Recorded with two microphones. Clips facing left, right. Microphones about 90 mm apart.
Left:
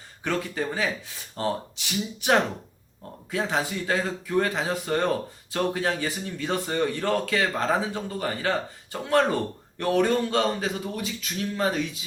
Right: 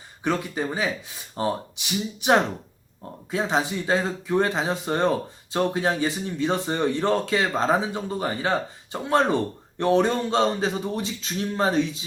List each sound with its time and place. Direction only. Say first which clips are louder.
0.3 s speech: right 2 dB; 20° right (ahead or behind)